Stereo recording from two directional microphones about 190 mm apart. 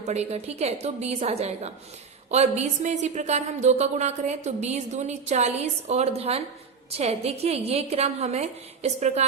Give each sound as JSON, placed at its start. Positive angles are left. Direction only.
{"t": 0.1, "sound": "a woman's voice", "side_deg": -35}